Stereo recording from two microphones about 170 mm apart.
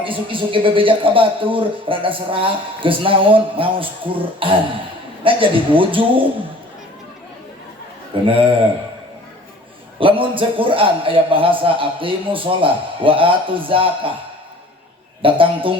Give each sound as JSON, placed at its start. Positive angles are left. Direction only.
{"t": 0.0, "sound": "speech", "side_deg": -30}
{"t": 8.3, "sound": "speech", "side_deg": -30}
{"t": 10.0, "sound": "speech", "side_deg": -30}
{"t": 15.2, "sound": "speech", "side_deg": -30}